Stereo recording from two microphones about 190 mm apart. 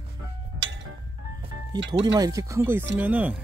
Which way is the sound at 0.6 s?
85° right.